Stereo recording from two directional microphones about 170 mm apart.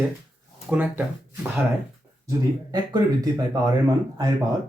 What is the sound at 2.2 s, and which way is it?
Speech, 20° right (ahead or behind).